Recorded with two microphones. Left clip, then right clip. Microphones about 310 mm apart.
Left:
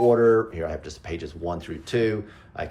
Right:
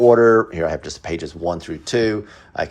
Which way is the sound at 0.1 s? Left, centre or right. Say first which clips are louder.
Right 6 dB; right.